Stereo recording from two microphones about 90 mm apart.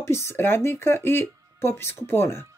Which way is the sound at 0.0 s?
30° left (ahead or behind).